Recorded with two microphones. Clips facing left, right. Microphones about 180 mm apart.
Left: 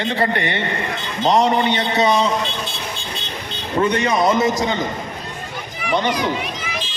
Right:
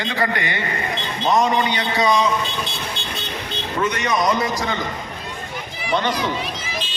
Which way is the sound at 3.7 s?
30° left (ahead or behind).